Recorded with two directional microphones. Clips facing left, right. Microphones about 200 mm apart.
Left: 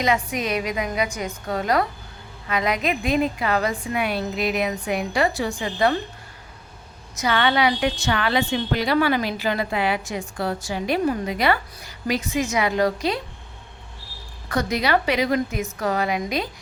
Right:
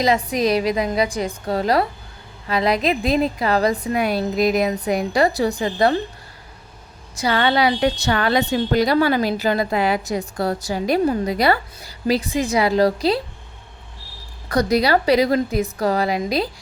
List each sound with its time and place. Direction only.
0.0 s a woman's voice: 35° right (ahead or behind)
7.2 s a woman's voice: 35° right (ahead or behind)
14.5 s a woman's voice: 35° right (ahead or behind)